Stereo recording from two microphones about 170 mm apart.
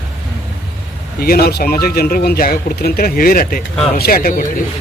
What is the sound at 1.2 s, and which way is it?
Speech, 65° left (ahead or behind).